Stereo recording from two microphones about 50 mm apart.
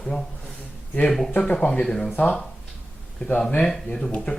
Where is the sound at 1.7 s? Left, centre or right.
Centre.